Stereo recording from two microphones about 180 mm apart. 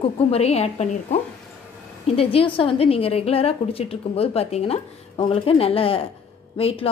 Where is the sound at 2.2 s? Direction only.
30° left (ahead or behind).